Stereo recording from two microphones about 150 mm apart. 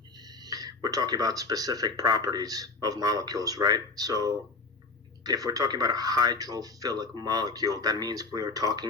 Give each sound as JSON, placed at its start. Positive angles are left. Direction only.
{"t": 0.4, "sound": "speech", "side_deg": -25}